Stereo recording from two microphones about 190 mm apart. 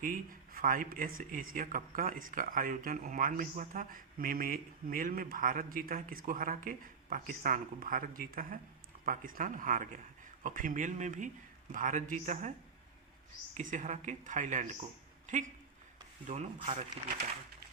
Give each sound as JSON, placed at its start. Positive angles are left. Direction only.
{"t": 0.0, "sound": "speech", "side_deg": -45}